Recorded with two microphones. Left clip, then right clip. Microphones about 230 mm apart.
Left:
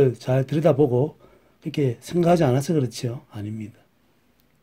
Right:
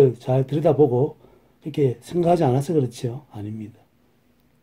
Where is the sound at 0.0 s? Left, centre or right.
Left.